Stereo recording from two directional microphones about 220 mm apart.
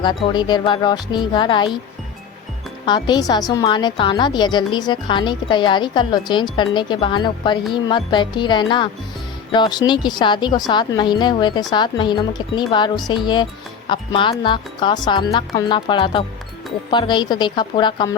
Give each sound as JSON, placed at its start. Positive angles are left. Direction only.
{"t": 0.0, "sound": "a woman's voice", "side_deg": 20}
{"t": 2.8, "sound": "a woman's voice", "side_deg": 20}